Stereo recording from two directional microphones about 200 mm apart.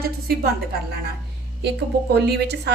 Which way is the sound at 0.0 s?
50° right (ahead or behind).